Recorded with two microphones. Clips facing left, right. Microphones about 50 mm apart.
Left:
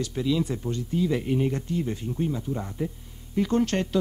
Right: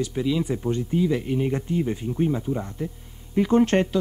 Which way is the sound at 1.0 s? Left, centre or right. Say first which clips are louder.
Left 2 dB; centre.